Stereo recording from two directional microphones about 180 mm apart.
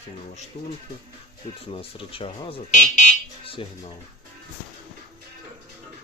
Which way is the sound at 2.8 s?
40° left (ahead or behind).